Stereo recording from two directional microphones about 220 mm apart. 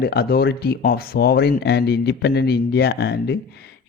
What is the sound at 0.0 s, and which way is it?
Speech, 45° left (ahead or behind).